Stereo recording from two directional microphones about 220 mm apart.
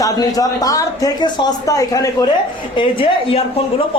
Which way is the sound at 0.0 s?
15° left (ahead or behind).